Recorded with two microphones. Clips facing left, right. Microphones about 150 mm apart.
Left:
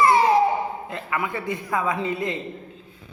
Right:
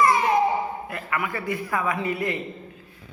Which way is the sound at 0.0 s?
30° left (ahead or behind).